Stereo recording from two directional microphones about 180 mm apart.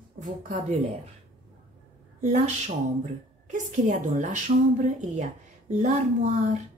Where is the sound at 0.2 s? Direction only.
45° right (ahead or behind).